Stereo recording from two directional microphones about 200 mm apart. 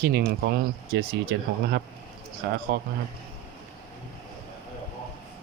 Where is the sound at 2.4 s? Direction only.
50° right (ahead or behind).